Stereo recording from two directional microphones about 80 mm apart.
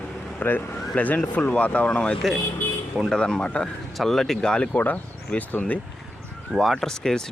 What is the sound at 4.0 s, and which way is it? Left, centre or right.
Speech, centre.